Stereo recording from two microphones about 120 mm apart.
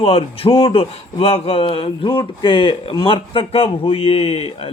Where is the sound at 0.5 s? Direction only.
45° left (ahead or behind).